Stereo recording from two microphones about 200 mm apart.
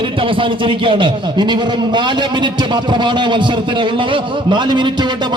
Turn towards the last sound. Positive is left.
turn(degrees=-20)  # may be behind; listen again after turning